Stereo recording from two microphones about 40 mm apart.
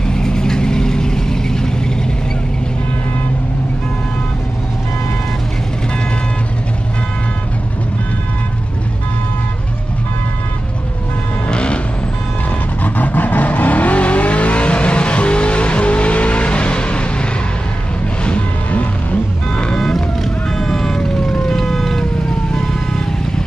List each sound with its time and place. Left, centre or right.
0.1 s vehicle: centre
11.4 s vehicle: left
12.8 s vehicle: left
19.7 s vehicle: centre
21.5 s vehicle: centre